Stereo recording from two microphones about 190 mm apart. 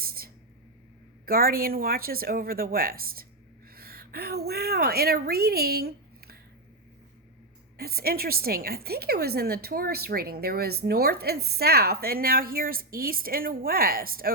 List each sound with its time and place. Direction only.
0.0 s a sound: 50° right (ahead or behind)
1.2 s a woman's voice: 50° right (ahead or behind)
7.8 s a woman's voice: 55° right (ahead or behind)